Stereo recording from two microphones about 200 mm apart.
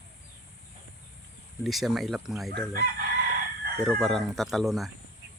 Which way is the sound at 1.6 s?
Centre (ahead or behind).